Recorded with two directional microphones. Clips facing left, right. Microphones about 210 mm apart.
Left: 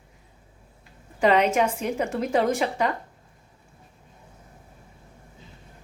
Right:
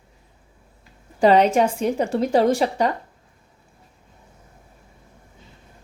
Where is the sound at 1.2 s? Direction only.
35° right (ahead or behind).